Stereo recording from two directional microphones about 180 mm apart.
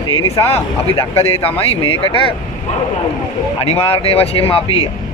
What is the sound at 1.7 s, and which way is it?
Speech, 30° left (ahead or behind).